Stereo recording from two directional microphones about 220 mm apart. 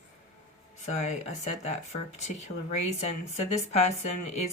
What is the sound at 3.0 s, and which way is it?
Speech, 30° left (ahead or behind).